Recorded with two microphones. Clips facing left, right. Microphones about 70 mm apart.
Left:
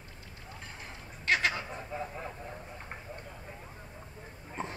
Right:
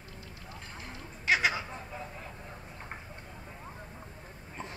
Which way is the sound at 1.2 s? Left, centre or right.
Centre.